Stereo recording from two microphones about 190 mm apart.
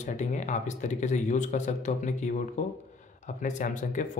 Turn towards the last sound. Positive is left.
turn(degrees=40)  # may be behind; listen again after turning